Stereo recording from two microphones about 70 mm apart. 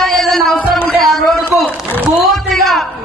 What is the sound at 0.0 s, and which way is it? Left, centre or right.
Music, centre.